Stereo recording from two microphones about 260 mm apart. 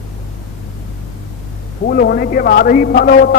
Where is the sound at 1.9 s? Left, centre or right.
Left.